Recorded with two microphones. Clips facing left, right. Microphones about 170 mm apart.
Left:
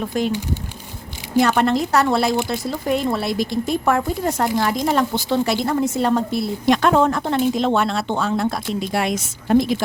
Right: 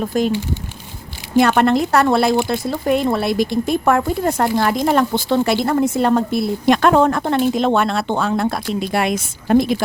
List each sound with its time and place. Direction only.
0.0 s speech: 45° right (ahead or behind)
1.4 s speech: 60° right (ahead or behind)